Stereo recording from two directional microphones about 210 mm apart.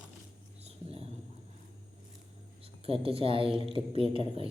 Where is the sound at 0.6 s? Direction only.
30° right (ahead or behind).